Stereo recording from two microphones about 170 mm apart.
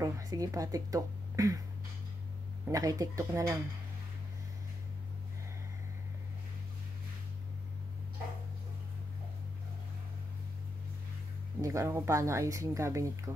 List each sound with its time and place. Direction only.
0.0 s speech: 20° right (ahead or behind)
2.7 s speech: 20° right (ahead or behind)
11.6 s speech: 15° right (ahead or behind)